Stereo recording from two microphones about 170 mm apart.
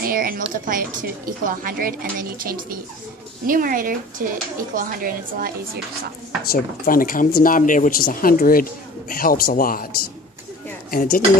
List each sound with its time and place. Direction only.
0.0 s speech: 55° right (ahead or behind)
6.5 s speech: 55° left (ahead or behind)
10.9 s dishes: 55° left (ahead or behind)